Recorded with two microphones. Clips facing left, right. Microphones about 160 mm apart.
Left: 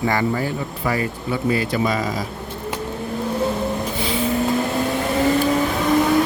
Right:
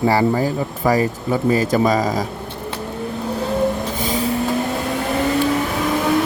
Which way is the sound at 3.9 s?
45° right (ahead or behind).